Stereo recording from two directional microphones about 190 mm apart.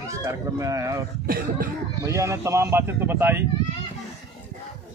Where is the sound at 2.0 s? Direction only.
15° right (ahead or behind).